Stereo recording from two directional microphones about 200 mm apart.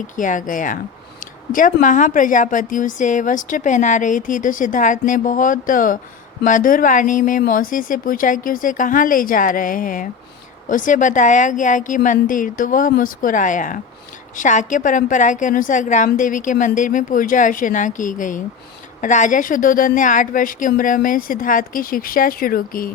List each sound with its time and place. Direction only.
0.2 s a woman's voice: 40° left (ahead or behind)